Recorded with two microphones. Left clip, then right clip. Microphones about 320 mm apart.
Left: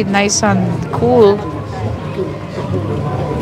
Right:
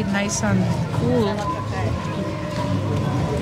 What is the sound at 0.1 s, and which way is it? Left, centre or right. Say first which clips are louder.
Speech: left 10 dB; centre.